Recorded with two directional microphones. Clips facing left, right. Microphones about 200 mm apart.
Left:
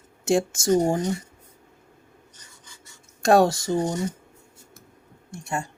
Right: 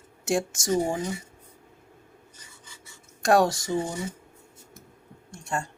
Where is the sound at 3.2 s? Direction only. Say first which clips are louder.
Left 3 dB; 25° left (ahead or behind).